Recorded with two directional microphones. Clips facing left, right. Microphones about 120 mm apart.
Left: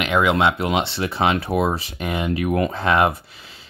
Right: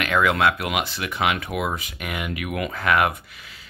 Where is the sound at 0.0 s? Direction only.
20° left (ahead or behind).